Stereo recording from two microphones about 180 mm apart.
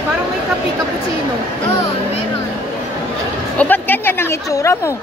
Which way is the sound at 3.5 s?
10° left (ahead or behind).